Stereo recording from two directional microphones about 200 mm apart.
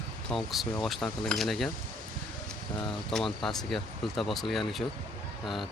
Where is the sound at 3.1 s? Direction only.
Centre (ahead or behind).